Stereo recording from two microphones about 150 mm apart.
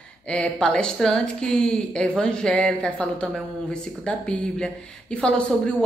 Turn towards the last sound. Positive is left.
turn(degrees=5)  # may be behind; listen again after turning